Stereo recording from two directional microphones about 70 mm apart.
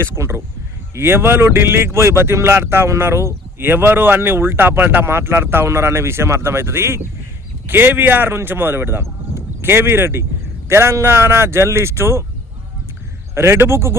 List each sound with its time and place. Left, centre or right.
0.2 s speech: right
13.3 s speech: right